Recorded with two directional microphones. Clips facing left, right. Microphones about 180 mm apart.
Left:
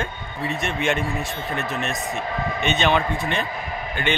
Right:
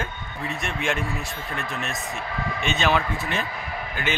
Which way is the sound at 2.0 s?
20° left (ahead or behind).